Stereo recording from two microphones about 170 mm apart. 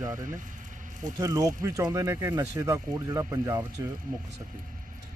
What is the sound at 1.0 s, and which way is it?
Speech, 20° right (ahead or behind).